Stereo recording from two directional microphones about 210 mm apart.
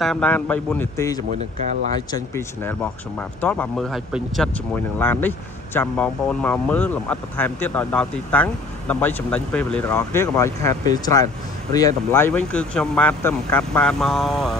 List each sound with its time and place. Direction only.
0.0 s speech: 5° left (ahead or behind)
1.4 s speech: 30° right (ahead or behind)
2.0 s speech: 15° left (ahead or behind)